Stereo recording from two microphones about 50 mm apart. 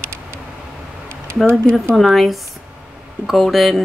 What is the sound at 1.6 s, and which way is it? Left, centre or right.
Speech, centre.